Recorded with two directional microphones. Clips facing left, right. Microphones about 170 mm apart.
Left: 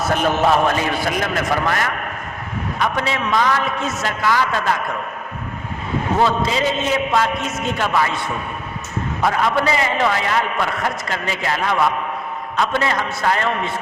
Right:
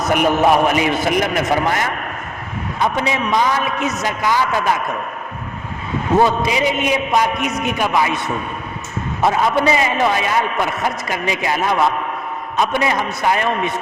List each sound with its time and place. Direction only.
0.0 s a man's voice: 15° right (ahead or behind)
6.1 s a man's voice: 15° right (ahead or behind)
9.2 s a man's voice: 20° right (ahead or behind)